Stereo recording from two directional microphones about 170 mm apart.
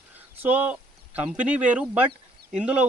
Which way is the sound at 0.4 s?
10° right (ahead or behind).